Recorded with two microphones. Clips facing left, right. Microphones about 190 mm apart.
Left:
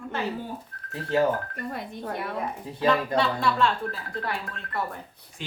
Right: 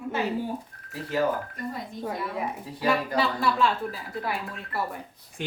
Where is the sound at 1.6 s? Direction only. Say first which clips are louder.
Even; 65° left (ahead or behind).